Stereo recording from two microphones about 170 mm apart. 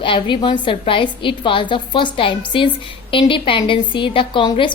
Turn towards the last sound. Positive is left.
turn(degrees=30)  # may be behind; listen again after turning